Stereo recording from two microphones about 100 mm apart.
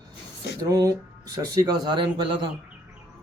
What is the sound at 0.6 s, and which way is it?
Speech, 35° right (ahead or behind).